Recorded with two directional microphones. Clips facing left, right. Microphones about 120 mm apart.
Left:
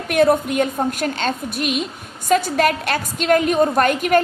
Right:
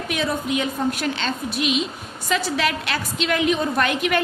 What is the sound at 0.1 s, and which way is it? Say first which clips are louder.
A woman's voice: left 9 dB; 55° left (ahead or behind).